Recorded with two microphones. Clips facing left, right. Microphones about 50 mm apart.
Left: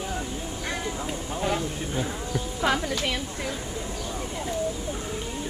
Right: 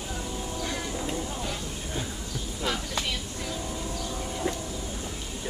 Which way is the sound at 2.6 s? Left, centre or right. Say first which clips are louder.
Left 6 dB; left.